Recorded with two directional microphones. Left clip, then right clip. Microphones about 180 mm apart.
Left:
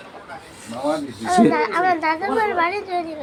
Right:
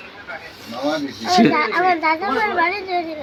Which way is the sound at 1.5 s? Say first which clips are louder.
Right 1 dB; 35° left (ahead or behind).